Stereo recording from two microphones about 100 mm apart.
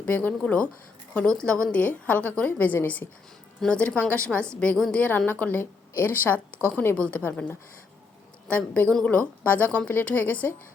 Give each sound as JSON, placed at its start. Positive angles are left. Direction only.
{"t": 0.0, "sound": "a woman's voice", "side_deg": 15}